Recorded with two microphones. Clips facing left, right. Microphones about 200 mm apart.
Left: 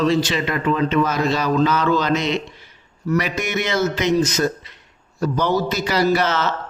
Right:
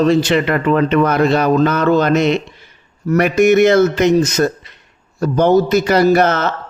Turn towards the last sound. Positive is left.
turn(degrees=-55)  # may be behind; listen again after turning